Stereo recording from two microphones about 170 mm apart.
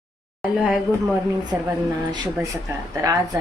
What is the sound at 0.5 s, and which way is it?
Speech, 5° right (ahead or behind).